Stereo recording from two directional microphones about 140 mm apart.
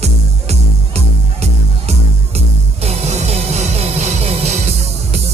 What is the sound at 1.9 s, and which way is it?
Music, 50° right (ahead or behind).